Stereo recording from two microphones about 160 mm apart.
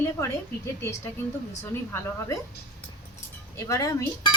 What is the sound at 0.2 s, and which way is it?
Speech, 20° left (ahead or behind).